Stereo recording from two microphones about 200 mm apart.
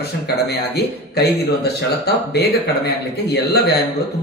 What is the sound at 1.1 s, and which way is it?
Speech, 55° left (ahead or behind).